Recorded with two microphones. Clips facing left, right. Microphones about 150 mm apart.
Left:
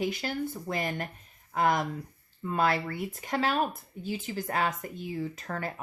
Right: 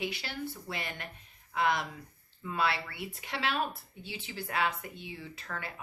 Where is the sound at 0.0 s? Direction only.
45° left (ahead or behind).